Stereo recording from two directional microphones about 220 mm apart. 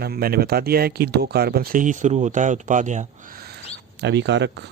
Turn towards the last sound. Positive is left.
turn(degrees=-50)  # may be behind; listen again after turning